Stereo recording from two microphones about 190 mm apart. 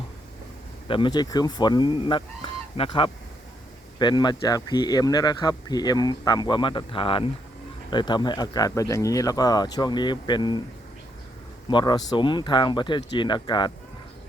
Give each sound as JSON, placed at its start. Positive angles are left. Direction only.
{"t": 0.9, "sound": "speech", "side_deg": 25}
{"t": 11.7, "sound": "speech", "side_deg": 25}